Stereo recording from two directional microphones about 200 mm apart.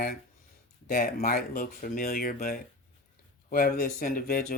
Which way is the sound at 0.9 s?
45° left (ahead or behind).